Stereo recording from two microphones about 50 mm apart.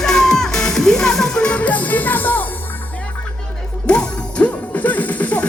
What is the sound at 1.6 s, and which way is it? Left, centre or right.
Music, left.